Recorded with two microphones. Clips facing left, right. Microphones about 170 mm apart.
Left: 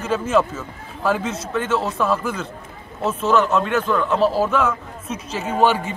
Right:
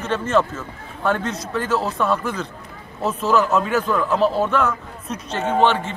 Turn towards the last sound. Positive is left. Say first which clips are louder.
# even
turn(degrees=10)  # may be behind; listen again after turning